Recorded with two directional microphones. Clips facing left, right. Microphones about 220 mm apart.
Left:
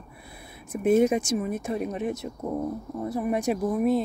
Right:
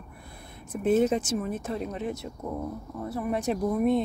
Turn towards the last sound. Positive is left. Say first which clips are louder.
# left 1 dB
turn(degrees=5)  # may be behind; listen again after turning